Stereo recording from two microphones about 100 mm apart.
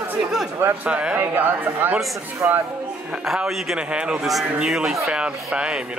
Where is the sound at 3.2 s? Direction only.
5° right (ahead or behind).